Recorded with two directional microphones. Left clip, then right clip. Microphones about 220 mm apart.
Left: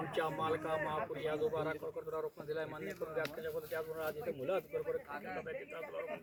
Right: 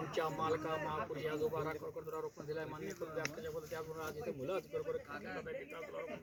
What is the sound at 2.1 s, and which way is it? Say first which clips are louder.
Speech: left 3 dB; 20° right (ahead or behind).